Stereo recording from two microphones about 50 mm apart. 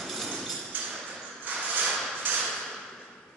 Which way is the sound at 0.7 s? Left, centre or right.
Right.